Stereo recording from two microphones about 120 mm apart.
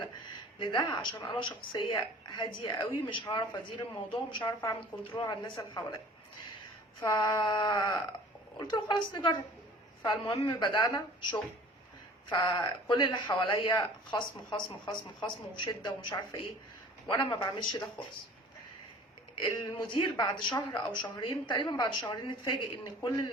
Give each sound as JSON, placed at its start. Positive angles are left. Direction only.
{"t": 0.6, "sound": "a woman's voice", "side_deg": 40}
{"t": 7.1, "sound": "a woman's voice", "side_deg": 35}
{"t": 19.4, "sound": "a woman's voice", "side_deg": 40}